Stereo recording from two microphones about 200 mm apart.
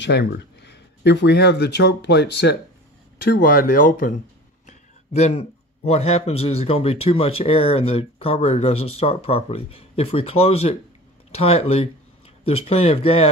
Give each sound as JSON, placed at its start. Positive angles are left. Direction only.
{"t": 0.0, "sound": "speech", "side_deg": 60}
{"t": 3.2, "sound": "speech", "side_deg": 45}
{"t": 5.1, "sound": "a man's voice", "side_deg": 30}